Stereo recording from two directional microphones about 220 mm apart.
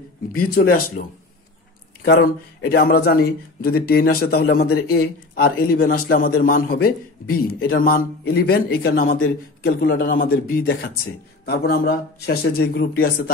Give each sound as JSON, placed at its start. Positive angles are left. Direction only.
{"t": 0.3, "sound": "speech", "side_deg": 40}
{"t": 2.6, "sound": "a man's voice", "side_deg": 45}